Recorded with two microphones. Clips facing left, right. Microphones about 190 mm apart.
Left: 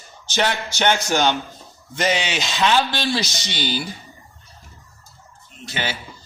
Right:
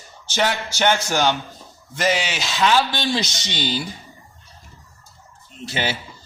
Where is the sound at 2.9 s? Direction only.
20° right (ahead or behind).